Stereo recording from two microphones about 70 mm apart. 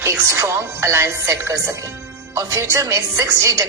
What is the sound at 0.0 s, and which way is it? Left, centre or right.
A woman's voice, right.